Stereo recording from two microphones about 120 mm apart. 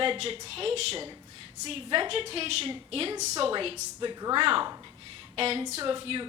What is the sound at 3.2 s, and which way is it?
Speech, 70° right (ahead or behind).